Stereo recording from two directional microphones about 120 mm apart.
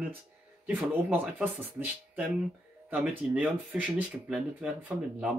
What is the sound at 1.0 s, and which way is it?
Speech, 15° right (ahead or behind).